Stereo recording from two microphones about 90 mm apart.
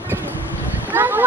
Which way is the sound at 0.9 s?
20° right (ahead or behind).